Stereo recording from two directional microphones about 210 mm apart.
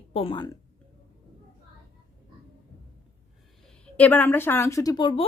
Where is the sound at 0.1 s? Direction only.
25° left (ahead or behind).